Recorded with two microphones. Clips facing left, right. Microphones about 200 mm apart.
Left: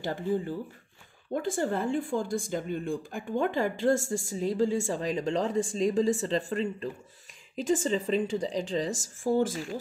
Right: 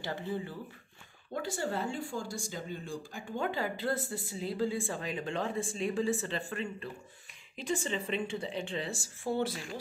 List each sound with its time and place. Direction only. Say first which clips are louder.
0.0 s speech: left 7 dB; 45° left (ahead or behind)